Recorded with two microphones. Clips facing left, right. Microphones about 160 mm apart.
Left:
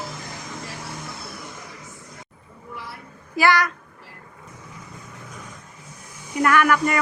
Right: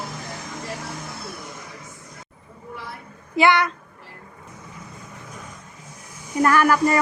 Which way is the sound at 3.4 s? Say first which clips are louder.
Right 2 dB; 25° right (ahead or behind).